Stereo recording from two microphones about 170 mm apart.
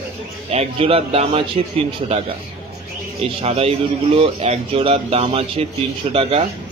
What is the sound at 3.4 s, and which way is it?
A man's voice, 35° right (ahead or behind).